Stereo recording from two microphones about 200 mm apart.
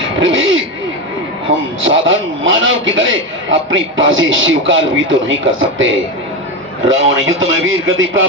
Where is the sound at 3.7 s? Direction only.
75° right (ahead or behind).